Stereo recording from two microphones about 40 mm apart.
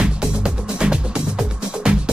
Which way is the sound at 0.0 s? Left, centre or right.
Right.